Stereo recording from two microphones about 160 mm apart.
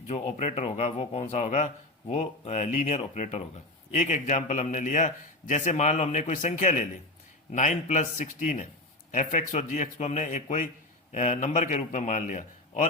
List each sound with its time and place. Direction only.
0.1 s a man's voice: 40° left (ahead or behind)